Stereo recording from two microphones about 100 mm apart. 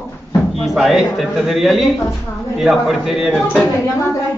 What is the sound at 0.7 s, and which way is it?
A man's voice, centre (ahead or behind).